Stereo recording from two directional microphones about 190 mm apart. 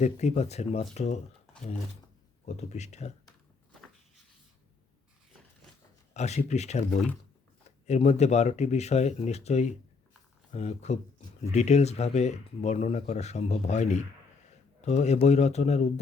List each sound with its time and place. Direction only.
0.0 s speech: 35° left (ahead or behind)
2.6 s speech: 35° left (ahead or behind)
6.1 s speech: 35° left (ahead or behind)